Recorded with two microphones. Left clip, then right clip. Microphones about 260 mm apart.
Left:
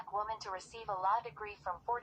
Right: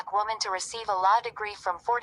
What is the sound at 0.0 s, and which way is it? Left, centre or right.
A woman's voice, right.